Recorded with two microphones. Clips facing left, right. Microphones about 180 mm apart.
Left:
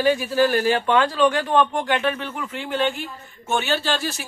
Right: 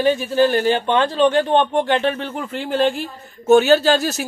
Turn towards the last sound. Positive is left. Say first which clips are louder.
# right 9 dB
turn(degrees=-40)  # may be behind; listen again after turning